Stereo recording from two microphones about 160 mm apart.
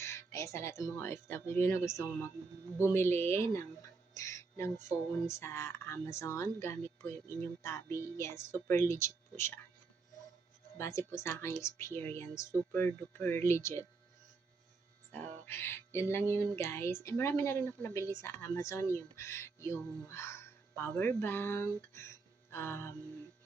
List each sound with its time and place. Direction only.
0.0 s speech: 15° left (ahead or behind)
10.8 s speech: 20° left (ahead or behind)
15.1 s speech: 15° left (ahead or behind)